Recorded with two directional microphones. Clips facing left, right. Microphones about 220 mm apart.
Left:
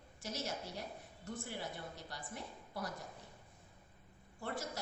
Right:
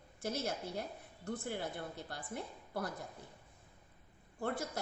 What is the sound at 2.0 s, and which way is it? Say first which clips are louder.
Speech: right 4 dB; 55° right (ahead or behind).